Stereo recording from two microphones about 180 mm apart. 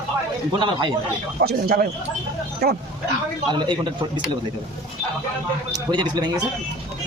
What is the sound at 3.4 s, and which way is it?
Speech, 25° right (ahead or behind).